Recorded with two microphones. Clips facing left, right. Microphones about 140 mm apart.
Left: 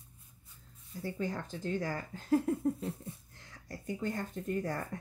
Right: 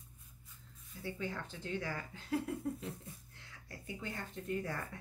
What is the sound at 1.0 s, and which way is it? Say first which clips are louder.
Speech: left 5 dB; 40° left (ahead or behind).